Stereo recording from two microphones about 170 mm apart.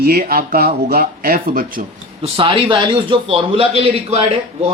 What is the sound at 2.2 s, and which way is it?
Speech, 30° right (ahead or behind).